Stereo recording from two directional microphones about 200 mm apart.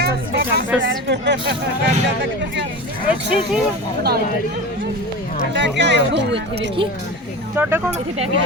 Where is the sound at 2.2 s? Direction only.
60° right (ahead or behind).